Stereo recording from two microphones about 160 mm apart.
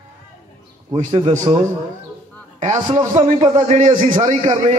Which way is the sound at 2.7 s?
40° right (ahead or behind).